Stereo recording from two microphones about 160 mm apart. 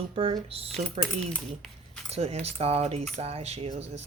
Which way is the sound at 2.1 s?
40° right (ahead or behind).